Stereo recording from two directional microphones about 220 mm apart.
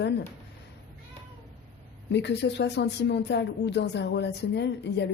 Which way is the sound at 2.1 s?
50° left (ahead or behind).